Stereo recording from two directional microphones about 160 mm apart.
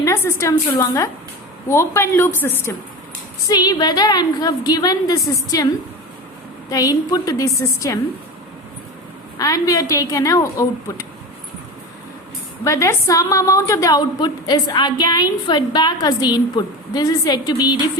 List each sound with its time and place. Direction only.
0.0 s a woman's voice: 15° left (ahead or behind)
3.5 s a woman's voice: 25° left (ahead or behind)
9.4 s a woman's voice: 20° left (ahead or behind)
12.6 s a woman's voice: 20° left (ahead or behind)